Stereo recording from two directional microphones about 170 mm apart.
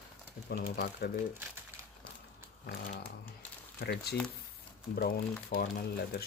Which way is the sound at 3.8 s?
75° left (ahead or behind).